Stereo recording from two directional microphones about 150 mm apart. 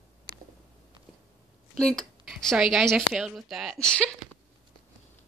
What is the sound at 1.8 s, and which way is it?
A woman's voice, centre (ahead or behind).